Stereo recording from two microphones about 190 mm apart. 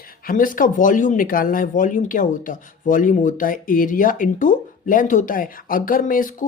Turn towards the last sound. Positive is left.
turn(degrees=45)  # may be behind; listen again after turning